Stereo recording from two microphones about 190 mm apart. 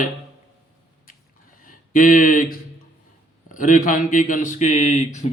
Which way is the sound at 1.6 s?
45° left (ahead or behind).